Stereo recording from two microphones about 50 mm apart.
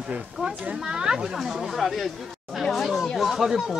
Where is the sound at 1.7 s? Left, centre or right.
Centre.